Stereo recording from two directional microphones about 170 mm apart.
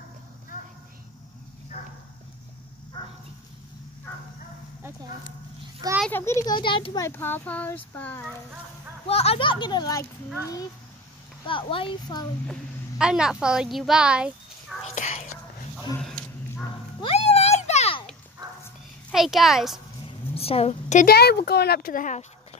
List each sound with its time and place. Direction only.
2.9 s dog: 25° left (ahead or behind)
6.0 s a child's voice: 15° left (ahead or behind)
7.1 s speech: 10° left (ahead or behind)
9.0 s a child's voice: 35° left (ahead or behind)
11.4 s a child's voice: 30° left (ahead or behind)
12.4 s a woman's voice: 5° right (ahead or behind)
15.0 s whispering: 45° left (ahead or behind)
16.0 s a sound: 5° left (ahead or behind)
17.0 s a sound: 35° left (ahead or behind)
19.1 s speech: centre (ahead or behind)
20.1 s a sound: 35° left (ahead or behind)
21.0 s speech: 70° left (ahead or behind); by 22.2 s 50° left (ahead or behind)